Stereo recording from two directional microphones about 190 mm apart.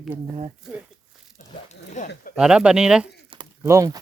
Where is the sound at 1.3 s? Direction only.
40° left (ahead or behind).